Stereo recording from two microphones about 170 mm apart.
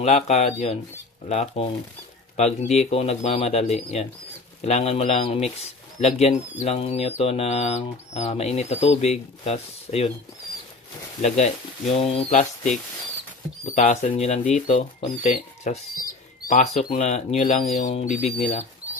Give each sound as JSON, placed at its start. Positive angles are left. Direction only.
{"t": 0.0, "sound": "speech", "side_deg": 40}
{"t": 11.2, "sound": "speech", "side_deg": 40}
{"t": 13.7, "sound": "speech", "side_deg": 45}